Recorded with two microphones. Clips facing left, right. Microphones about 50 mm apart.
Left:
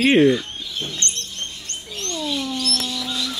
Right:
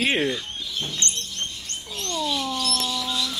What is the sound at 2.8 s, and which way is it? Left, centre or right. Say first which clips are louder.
Bird: even; centre.